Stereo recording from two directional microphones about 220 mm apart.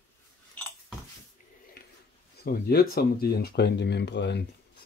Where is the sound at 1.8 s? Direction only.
45° left (ahead or behind).